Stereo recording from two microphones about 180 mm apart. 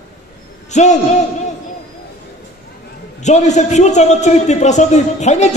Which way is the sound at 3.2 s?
40° left (ahead or behind).